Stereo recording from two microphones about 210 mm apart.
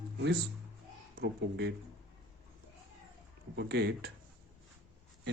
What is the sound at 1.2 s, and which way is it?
Speech, 55° right (ahead or behind).